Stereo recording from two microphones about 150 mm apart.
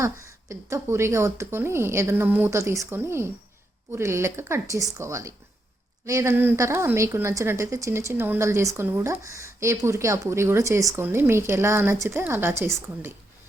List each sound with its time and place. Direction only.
0.0 s a woman's voice: 20° right (ahead or behind)